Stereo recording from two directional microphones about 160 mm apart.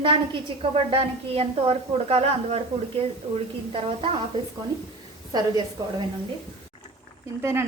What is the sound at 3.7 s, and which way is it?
Speech, 35° right (ahead or behind).